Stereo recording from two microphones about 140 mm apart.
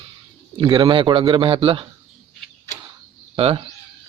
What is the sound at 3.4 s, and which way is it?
Speech, 45° right (ahead or behind).